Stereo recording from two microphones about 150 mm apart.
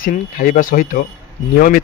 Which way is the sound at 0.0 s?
70° left (ahead or behind).